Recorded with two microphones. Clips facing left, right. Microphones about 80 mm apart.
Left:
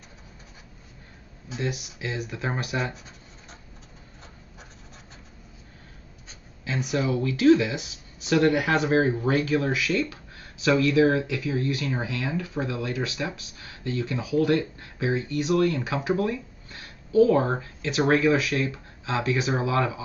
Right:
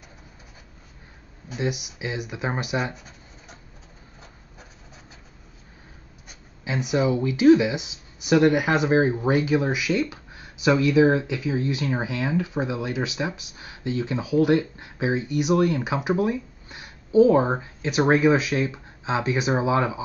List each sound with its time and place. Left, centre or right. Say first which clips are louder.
1.6 s speech: right 3 dB; centre
6.2 s speech: right 2 dB; centre